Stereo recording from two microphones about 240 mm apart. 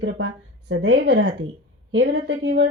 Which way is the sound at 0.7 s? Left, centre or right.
Right.